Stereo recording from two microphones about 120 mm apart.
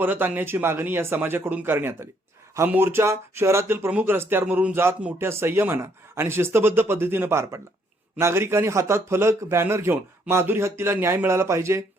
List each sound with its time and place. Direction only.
0.0 s a man's voice: 15° right (ahead or behind)